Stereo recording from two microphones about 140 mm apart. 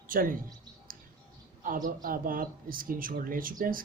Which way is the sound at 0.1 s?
80° right.